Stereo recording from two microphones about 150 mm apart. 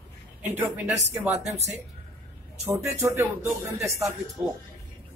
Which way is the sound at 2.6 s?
15° right (ahead or behind).